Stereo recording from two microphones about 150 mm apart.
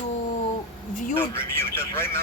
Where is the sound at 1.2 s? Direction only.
15° left (ahead or behind).